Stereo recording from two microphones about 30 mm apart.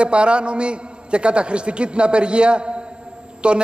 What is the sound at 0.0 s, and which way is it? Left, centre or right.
A man's voice, right.